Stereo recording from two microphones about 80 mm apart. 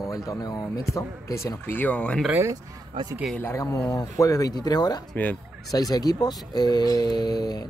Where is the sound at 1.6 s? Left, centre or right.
Left.